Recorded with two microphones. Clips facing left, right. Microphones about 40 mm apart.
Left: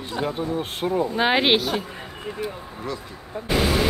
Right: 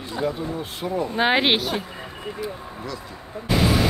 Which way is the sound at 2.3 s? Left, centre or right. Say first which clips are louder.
Even; left.